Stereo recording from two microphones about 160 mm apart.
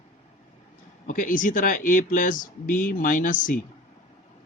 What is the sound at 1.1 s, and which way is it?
Speech, 55° left (ahead or behind).